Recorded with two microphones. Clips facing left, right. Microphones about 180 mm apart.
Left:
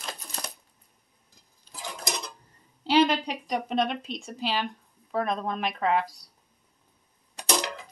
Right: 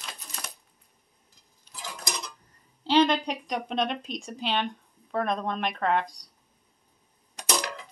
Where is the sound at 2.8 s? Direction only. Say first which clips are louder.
Even; 10° left (ahead or behind).